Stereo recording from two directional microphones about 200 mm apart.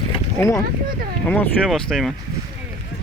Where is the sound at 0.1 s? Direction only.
15° left (ahead or behind).